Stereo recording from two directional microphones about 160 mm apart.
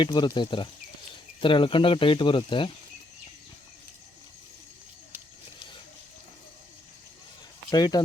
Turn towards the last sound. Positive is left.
turn(degrees=25)  # may be behind; listen again after turning